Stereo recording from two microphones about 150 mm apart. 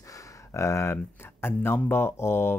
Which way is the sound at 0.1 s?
20° left (ahead or behind).